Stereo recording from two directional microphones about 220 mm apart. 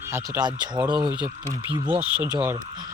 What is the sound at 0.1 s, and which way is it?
Speech, 15° right (ahead or behind).